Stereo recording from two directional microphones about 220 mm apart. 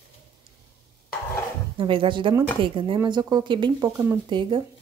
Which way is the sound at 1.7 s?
25° right (ahead or behind).